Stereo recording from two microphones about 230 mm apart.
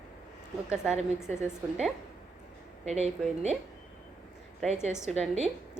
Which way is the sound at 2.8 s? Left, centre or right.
Right.